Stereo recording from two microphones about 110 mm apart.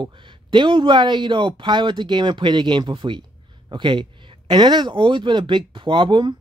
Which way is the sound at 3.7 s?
45° right (ahead or behind).